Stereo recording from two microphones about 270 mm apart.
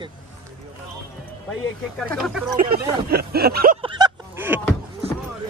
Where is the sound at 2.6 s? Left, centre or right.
Right.